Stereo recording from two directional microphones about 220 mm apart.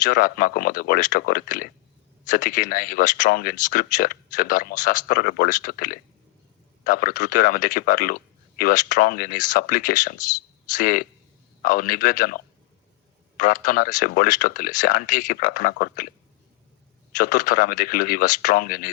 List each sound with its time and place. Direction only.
0.0 s speech: 40° left (ahead or behind)
17.1 s speech: 35° left (ahead or behind)